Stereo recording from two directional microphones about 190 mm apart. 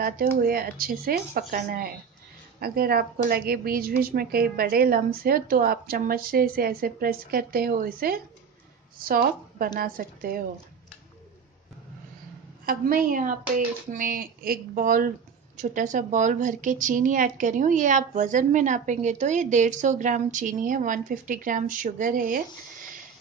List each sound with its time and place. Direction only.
0.0 s a woman's voice: 50° right (ahead or behind)
12.6 s a woman's voice: 45° right (ahead or behind)